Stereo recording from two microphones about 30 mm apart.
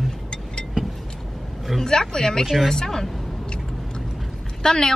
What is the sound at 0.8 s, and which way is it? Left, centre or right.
Vehicle, right.